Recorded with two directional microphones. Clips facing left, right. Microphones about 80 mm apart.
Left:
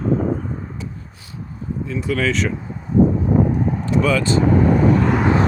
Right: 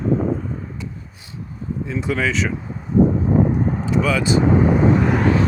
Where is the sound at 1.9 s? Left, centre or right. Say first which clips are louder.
Even; right.